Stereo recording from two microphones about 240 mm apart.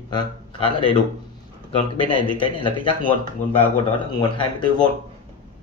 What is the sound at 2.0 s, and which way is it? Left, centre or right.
Speech, centre.